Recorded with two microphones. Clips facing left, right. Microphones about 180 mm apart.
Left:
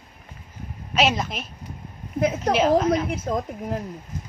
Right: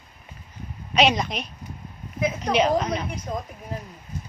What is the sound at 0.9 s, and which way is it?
Speech, 5° left (ahead or behind).